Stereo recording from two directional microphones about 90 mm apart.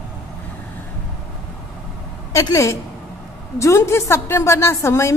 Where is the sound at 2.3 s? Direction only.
40° left (ahead or behind).